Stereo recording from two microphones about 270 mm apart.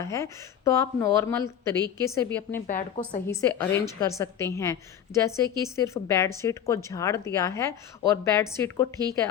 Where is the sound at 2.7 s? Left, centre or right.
Left.